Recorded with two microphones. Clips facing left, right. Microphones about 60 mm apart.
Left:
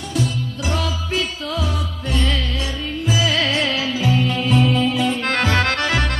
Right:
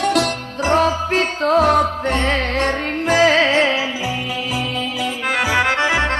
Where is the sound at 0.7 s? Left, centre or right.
Right.